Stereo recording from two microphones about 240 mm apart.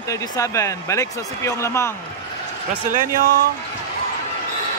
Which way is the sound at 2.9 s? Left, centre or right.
Right.